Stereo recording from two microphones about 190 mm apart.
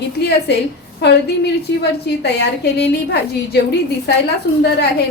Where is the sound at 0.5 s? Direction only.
60° left (ahead or behind).